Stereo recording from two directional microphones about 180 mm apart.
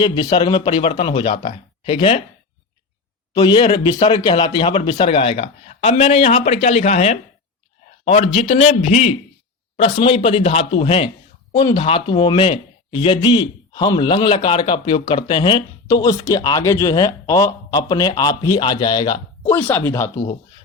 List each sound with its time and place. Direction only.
0.0 s speech: 25° left (ahead or behind)
3.3 s speech: 30° left (ahead or behind)
19.5 s speech: 10° left (ahead or behind)